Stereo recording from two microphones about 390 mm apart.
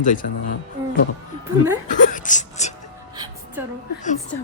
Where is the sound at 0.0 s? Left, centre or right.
Centre.